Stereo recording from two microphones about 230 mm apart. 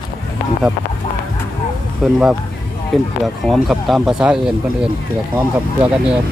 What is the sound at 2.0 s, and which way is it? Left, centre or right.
Speech, centre.